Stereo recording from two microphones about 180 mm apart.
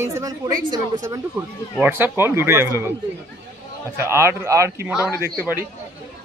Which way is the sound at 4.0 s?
15° right (ahead or behind).